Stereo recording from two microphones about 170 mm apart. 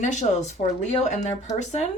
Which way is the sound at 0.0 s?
45° left (ahead or behind).